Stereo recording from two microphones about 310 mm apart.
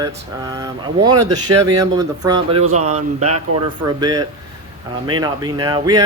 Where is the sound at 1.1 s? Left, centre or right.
Right.